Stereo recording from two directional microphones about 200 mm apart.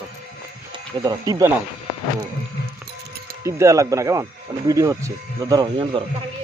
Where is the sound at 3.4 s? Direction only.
15° right (ahead or behind).